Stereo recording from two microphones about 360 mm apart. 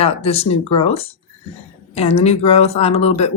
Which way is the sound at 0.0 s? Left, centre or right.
Centre.